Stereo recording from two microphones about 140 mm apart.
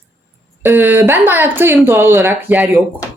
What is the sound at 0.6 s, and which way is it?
Speech, 15° right (ahead or behind).